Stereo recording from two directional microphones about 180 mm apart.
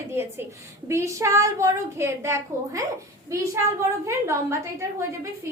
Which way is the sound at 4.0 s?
15° right (ahead or behind).